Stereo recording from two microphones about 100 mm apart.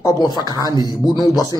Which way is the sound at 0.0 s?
35° left (ahead or behind).